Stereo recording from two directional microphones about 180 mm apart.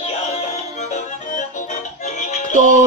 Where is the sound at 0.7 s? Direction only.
40° left (ahead or behind).